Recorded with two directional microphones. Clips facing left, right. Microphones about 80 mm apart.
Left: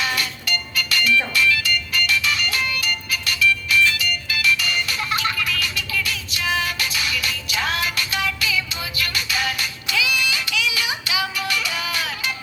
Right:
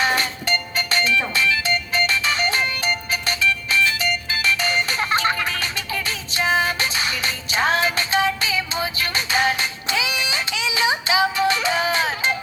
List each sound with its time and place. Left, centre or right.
0.0 s music: right